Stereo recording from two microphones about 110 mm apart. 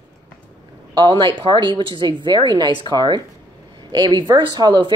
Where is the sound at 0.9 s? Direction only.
40° right (ahead or behind).